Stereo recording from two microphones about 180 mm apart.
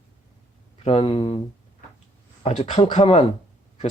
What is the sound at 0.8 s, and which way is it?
Speech, 35° left (ahead or behind).